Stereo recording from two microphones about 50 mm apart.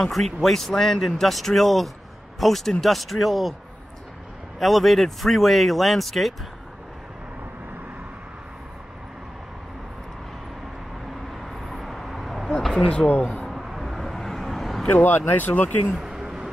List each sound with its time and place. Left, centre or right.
0.0 s speech: centre
4.6 s speech: centre
11.4 s vehicle: centre
12.7 s speech: left
13.5 s vehicle: centre
15.1 s speech: left
15.9 s vehicle: centre